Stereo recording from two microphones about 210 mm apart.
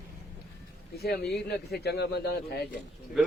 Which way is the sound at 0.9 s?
50° left (ahead or behind).